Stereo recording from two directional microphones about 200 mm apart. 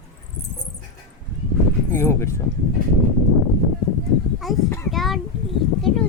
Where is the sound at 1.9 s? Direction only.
15° left (ahead or behind).